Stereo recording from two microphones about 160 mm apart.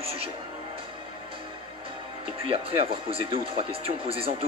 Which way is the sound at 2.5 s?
35° right (ahead or behind).